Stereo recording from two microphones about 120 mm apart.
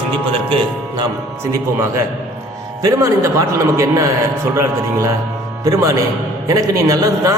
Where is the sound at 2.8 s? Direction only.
30° right (ahead or behind).